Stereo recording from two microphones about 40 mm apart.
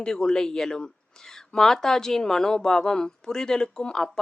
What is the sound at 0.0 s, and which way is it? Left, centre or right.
A woman's voice, left.